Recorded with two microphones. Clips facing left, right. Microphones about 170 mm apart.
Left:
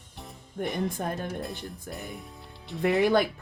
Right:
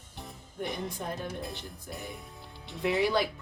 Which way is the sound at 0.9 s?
50° left (ahead or behind).